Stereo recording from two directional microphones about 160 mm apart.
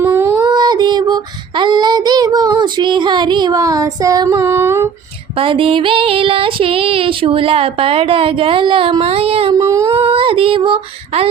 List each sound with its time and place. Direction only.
0.0 s child singing: 15° right (ahead or behind)
0.4 s child singing: 25° right (ahead or behind)
5.4 s female singing: 35° right (ahead or behind)
9.5 s child singing: 20° right (ahead or behind)
9.9 s female singing: 35° right (ahead or behind)